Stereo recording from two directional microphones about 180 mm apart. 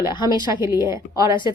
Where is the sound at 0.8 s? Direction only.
15° right (ahead or behind).